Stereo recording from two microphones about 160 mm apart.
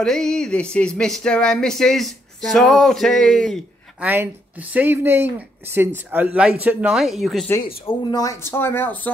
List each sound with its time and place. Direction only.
0.0 s speech: centre (ahead or behind)
4.0 s speech: 10° right (ahead or behind)
7.6 s speech: 35° left (ahead or behind); by 9.1 s 10° left (ahead or behind)